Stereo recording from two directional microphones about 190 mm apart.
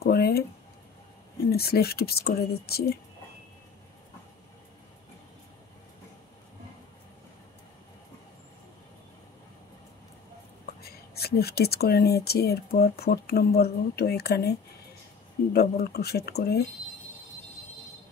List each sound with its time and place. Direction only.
0.0 s speech: 55° left (ahead or behind)
1.5 s speech: 55° left (ahead or behind)
10.8 s speech: 55° left (ahead or behind)
15.5 s speech: 55° left (ahead or behind)